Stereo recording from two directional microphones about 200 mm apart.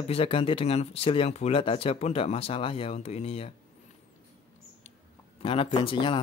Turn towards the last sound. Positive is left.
turn(degrees=25)  # may be behind; listen again after turning